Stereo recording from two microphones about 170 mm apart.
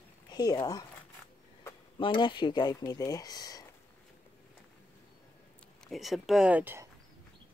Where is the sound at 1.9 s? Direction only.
30° left (ahead or behind).